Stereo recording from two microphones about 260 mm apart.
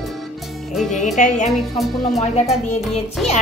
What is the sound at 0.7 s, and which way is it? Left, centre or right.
Speech, centre.